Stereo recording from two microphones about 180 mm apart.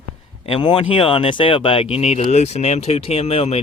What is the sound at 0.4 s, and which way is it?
Speech, 30° left (ahead or behind).